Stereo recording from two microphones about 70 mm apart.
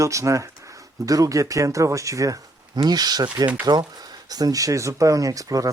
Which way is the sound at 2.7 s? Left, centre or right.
Right.